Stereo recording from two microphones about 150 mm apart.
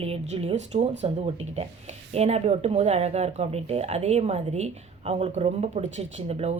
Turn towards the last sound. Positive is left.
turn(degrees=-45)  # may be behind; listen again after turning